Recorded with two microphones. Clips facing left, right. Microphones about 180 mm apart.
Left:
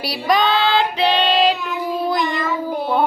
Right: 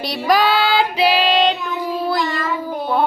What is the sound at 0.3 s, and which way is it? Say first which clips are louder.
Child singing: even; 5° right (ahead or behind).